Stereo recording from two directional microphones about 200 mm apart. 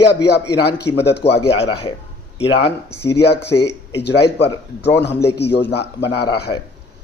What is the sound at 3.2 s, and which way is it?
Speech, 55° left (ahead or behind).